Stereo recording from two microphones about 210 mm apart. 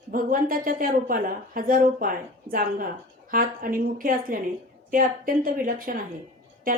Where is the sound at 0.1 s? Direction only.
40° right (ahead or behind).